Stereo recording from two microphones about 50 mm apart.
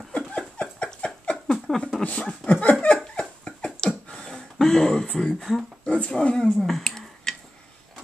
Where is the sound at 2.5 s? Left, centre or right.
Left.